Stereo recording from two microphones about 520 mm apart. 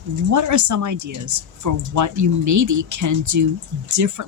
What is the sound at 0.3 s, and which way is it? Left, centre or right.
Speech, right.